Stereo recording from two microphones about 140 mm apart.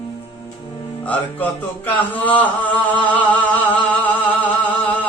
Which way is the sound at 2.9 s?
10° left (ahead or behind).